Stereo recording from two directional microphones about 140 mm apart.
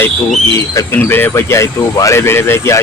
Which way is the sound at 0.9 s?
15° left (ahead or behind).